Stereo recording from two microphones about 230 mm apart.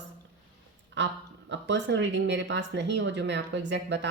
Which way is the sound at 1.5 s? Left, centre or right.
Right.